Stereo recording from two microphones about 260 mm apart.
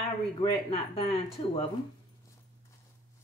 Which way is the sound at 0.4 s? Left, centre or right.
Left.